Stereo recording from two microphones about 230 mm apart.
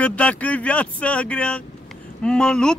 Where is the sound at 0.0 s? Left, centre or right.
Centre.